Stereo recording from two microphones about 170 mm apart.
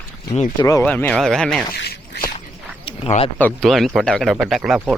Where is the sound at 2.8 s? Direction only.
35° left (ahead or behind).